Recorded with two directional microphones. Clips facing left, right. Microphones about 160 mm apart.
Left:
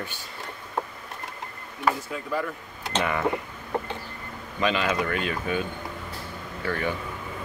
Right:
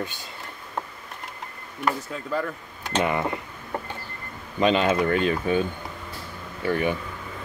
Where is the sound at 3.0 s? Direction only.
20° right (ahead or behind).